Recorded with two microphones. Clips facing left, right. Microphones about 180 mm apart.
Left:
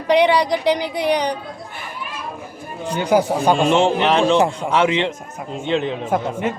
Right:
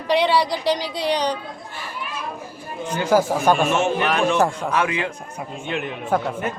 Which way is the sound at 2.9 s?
15° left (ahead or behind).